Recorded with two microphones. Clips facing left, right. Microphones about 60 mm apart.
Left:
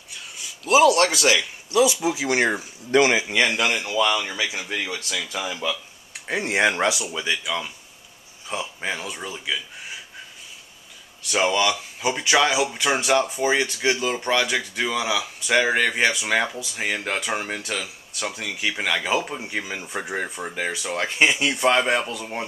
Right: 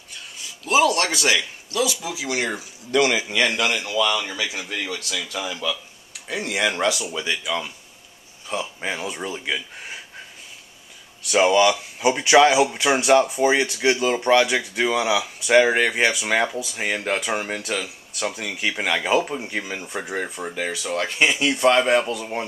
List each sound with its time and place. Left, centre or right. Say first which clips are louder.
0.1 s a sound: even; centre
1.7 s speech: left 6 dB; left
2.1 s speech: left 4 dB; left
6.7 s speech: even; centre
8.5 s speech: right 2 dB; centre
9.1 s speech: right 3 dB; centre
9.4 s speech: right 1 dB; right
11.2 s speech: right 4 dB; centre